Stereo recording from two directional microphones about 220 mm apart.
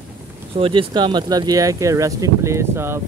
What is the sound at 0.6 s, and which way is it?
Speech, 25° right (ahead or behind).